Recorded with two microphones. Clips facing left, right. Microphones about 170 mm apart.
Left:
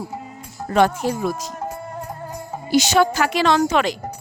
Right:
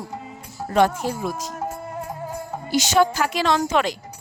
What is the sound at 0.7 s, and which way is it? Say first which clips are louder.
Speech: left 2 dB; 70° left (ahead or behind).